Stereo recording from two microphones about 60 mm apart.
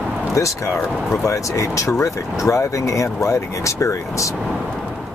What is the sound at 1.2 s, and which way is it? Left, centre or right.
Speech, left.